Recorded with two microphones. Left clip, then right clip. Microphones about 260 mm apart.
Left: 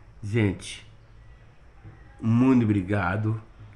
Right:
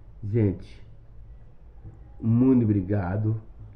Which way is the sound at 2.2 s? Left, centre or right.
Left.